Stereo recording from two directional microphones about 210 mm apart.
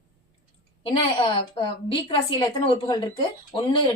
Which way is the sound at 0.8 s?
25° left (ahead or behind).